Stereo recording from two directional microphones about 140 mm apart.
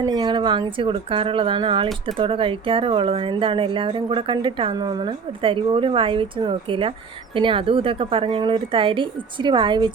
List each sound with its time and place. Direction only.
0.0 s speech: 30° right (ahead or behind)